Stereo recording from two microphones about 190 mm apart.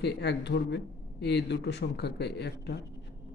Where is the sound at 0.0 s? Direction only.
60° left (ahead or behind).